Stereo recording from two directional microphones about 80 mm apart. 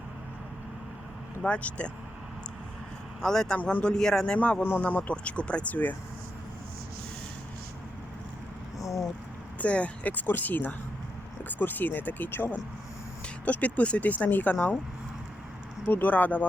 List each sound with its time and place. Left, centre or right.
1.4 s speech: centre
3.2 s speech: centre
3.6 s speech: centre
3.9 s speech: centre
4.4 s speech: left
8.8 s a sound: left
9.6 s speech: centre
15.9 s speech: left